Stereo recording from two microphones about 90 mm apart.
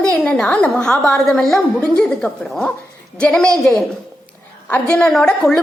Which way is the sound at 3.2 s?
10° left (ahead or behind).